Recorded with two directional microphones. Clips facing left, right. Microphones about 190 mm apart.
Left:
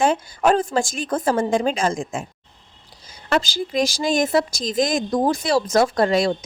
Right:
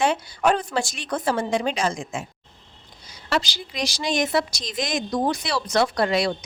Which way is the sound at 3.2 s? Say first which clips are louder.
Left 4 dB; 50° left (ahead or behind).